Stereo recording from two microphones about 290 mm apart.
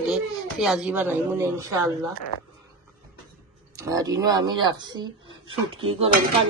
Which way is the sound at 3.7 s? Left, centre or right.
Centre.